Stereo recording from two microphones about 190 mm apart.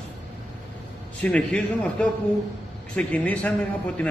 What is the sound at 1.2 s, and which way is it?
A man's voice, 5° left (ahead or behind).